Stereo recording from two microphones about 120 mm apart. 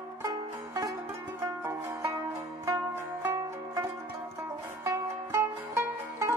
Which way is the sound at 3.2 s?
25° right (ahead or behind).